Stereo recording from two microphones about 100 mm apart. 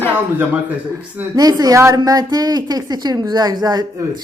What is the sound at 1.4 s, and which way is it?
Speech, 40° right (ahead or behind).